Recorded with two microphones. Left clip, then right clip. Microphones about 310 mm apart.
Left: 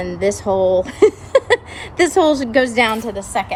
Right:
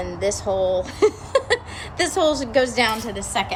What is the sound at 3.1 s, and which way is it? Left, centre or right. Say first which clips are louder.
Speech: left 3 dB; centre.